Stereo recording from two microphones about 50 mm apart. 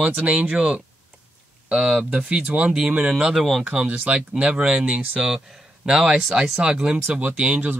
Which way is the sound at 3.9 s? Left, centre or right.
Right.